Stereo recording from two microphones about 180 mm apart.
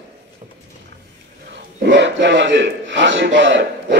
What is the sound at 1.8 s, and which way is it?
A man's voice, 80° right.